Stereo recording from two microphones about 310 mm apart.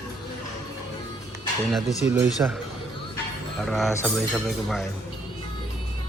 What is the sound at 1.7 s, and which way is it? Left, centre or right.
Speech, centre.